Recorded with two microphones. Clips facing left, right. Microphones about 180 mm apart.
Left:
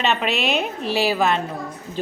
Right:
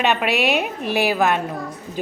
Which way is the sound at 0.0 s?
10° right (ahead or behind).